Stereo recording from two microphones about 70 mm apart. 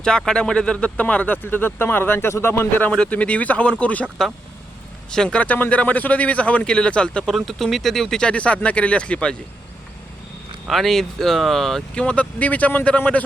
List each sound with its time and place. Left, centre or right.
0.3 s speech: centre; by 2.9 s left
2.9 s speech: centre
5.1 s speech: centre
5.4 s speech: left
7.3 s speech: centre
8.3 s speech: centre
10.7 s speech: centre
12.0 s speech: centre